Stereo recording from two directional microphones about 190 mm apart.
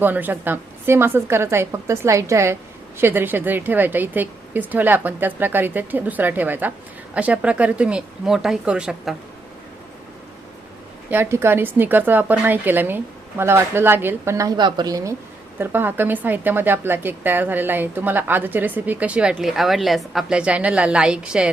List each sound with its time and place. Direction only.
0.0 s a woman's voice: 10° right (ahead or behind)
11.1 s a woman's voice: 10° right (ahead or behind)